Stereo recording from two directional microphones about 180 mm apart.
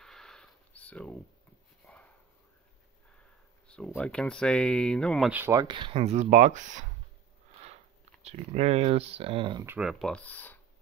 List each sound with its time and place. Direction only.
0.0 s a sound: 5° left (ahead or behind)
3.6 s speech: 5° left (ahead or behind)
5.3 s speech: 15° right (ahead or behind); by 6.9 s 45° right (ahead or behind)
8.2 s speech: 35° right (ahead or behind)
9.7 s speech: 5° right (ahead or behind)